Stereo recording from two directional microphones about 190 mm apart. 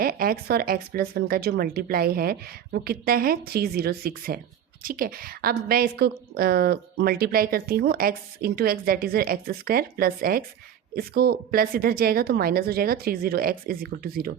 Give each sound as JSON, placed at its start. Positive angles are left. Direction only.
{"t": 0.0, "sound": "a woman's voice", "side_deg": -50}